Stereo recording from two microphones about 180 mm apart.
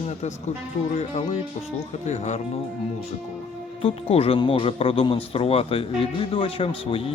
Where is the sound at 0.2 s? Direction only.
40° left (ahead or behind).